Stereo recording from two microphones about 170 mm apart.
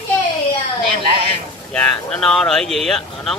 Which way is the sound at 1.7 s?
5° left (ahead or behind).